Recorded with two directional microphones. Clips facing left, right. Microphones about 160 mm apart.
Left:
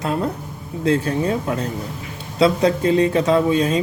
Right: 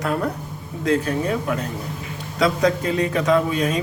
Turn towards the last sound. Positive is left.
turn(degrees=30)  # may be behind; listen again after turning